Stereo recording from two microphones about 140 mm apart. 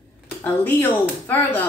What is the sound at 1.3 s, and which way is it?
Speech, 15° left (ahead or behind).